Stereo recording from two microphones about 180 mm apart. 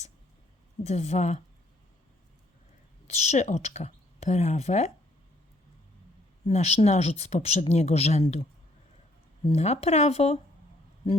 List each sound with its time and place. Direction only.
0.9 s speech: 40° left (ahead or behind)
3.1 s speech: 40° left (ahead or behind)
6.5 s speech: 35° left (ahead or behind)
9.6 s speech: 35° left (ahead or behind)